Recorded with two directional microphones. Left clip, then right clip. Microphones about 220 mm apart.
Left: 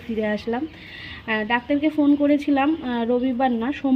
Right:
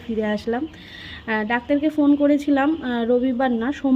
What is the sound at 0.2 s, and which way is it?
A woman's voice, 15° right (ahead or behind).